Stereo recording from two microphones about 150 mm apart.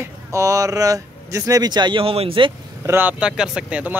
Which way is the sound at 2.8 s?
15° right (ahead or behind).